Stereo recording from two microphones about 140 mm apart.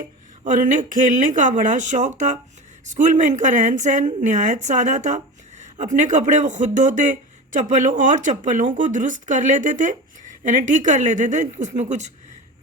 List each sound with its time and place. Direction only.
0.5 s a woman's voice: 70° right (ahead or behind)